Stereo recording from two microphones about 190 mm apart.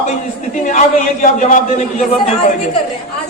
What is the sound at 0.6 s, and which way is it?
Speech, 40° left (ahead or behind).